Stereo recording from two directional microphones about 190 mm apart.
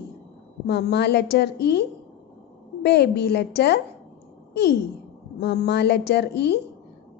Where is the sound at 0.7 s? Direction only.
60° left (ahead or behind).